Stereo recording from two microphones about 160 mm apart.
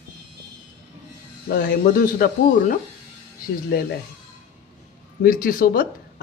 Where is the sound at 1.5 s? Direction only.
70° left (ahead or behind).